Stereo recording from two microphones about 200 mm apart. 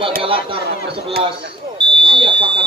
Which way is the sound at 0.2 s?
25° right (ahead or behind).